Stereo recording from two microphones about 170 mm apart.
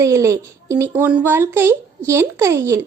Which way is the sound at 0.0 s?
20° right (ahead or behind).